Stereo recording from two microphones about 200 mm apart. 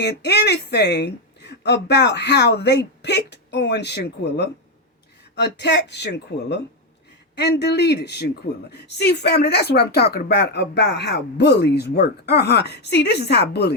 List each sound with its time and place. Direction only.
0.0 s speech: 55° left (ahead or behind)